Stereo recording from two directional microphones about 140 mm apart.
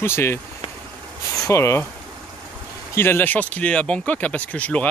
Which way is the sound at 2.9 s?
15° left (ahead or behind).